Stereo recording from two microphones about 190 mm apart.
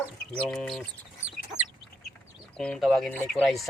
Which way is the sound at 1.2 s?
35° right (ahead or behind).